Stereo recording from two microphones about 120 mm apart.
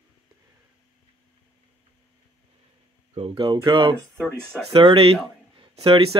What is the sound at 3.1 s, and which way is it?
Speech, 45° right (ahead or behind).